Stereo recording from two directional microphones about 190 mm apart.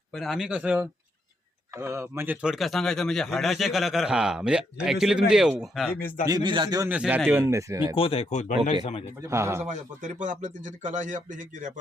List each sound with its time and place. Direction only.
0.1 s a man's voice: centre (ahead or behind)
6.0 s a man's voice: 50° left (ahead or behind)
6.2 s a man's voice: 20° right (ahead or behind)
6.9 s speech: 5° right (ahead or behind)
7.9 s speech: 30° left (ahead or behind)
9.2 s speech: 15° right (ahead or behind)
9.6 s speech: 40° right (ahead or behind)